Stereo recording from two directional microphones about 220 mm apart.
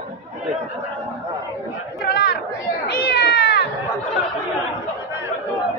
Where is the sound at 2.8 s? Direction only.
45° left (ahead or behind).